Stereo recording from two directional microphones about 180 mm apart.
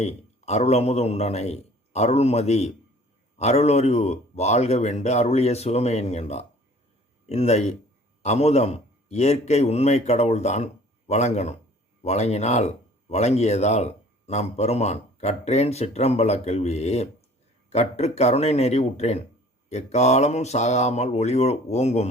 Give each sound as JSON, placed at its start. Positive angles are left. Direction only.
{"t": 0.0, "sound": "speech", "side_deg": 35}